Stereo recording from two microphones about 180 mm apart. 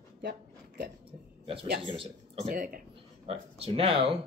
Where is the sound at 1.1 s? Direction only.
30° right (ahead or behind).